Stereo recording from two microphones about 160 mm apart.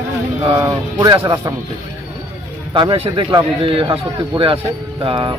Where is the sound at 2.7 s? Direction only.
35° right (ahead or behind).